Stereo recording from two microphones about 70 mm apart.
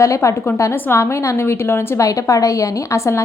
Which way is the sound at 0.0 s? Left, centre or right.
Left.